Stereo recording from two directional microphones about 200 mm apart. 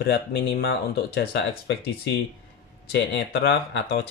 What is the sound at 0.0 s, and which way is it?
Speech, 50° left (ahead or behind).